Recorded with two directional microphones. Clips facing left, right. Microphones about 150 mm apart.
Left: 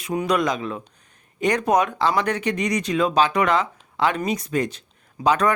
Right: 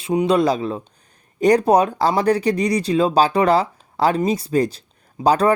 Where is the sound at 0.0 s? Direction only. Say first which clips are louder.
Right 5 dB; 25° right (ahead or behind).